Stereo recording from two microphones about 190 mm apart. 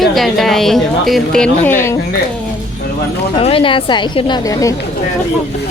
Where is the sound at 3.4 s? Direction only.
30° left (ahead or behind).